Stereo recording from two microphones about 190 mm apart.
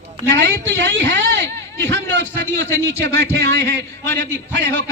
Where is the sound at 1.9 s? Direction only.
70° right (ahead or behind).